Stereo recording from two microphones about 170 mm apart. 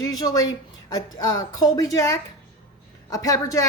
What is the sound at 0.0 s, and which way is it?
A woman's voice, 20° left (ahead or behind).